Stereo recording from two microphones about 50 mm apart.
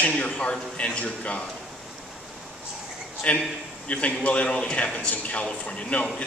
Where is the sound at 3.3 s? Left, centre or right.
Left.